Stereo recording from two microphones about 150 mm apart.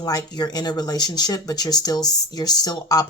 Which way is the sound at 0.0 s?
25° left (ahead or behind).